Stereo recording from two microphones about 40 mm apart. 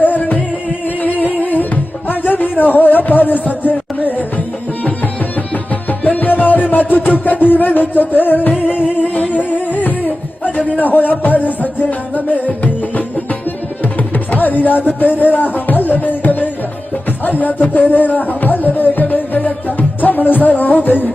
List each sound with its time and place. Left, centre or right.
0.0 s music: left
6.1 s music: left
9.7 s a sound: left
10.7 s music: left
14.3 s music: left
17.2 s speech: left
17.7 s music: left